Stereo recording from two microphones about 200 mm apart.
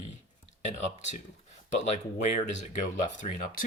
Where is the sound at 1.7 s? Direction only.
35° left (ahead or behind).